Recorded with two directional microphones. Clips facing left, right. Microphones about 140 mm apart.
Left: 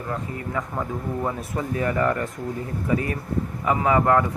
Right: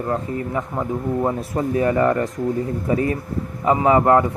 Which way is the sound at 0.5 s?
25° right (ahead or behind).